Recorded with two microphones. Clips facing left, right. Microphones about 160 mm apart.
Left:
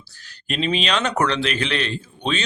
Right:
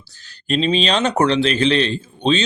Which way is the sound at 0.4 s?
35° right (ahead or behind).